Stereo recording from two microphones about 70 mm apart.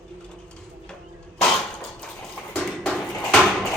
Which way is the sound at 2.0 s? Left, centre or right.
Centre.